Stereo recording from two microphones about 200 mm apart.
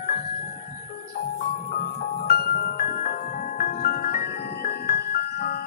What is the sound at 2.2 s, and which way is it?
Music, 50° left (ahead or behind).